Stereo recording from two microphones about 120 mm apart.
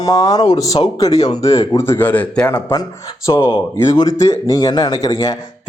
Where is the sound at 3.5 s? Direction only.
35° left (ahead or behind).